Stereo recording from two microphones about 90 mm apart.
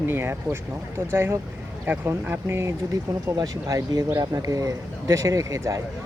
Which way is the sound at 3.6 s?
45° right (ahead or behind).